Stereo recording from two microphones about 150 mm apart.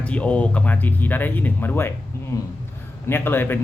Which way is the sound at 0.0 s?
10° left (ahead or behind).